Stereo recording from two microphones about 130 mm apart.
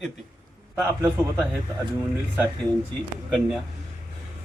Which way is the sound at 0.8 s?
15° right (ahead or behind).